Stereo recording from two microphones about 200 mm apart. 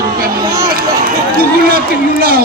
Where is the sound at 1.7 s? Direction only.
45° right (ahead or behind).